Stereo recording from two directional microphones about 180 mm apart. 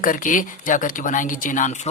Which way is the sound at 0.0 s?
45° left (ahead or behind).